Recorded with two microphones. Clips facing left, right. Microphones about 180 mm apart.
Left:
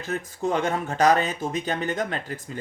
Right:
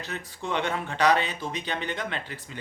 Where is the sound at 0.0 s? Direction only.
45° left (ahead or behind).